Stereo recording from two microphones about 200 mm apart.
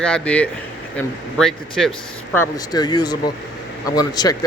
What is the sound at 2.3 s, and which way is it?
Speech, 15° left (ahead or behind).